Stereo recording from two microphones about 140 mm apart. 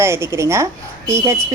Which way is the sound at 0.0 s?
20° right (ahead or behind).